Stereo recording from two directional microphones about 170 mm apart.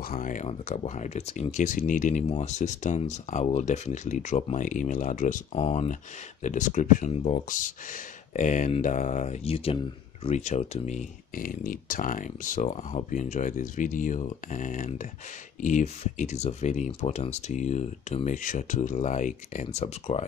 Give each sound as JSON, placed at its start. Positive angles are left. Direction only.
{"t": 0.0, "sound": "speech", "side_deg": 50}